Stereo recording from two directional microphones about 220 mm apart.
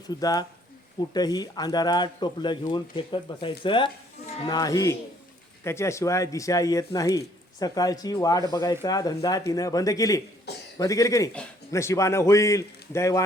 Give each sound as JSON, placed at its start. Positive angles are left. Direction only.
{"t": 0.1, "sound": "speech", "side_deg": 15}